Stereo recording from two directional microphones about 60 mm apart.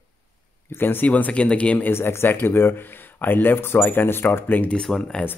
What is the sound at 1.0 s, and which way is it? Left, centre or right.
Speech, left.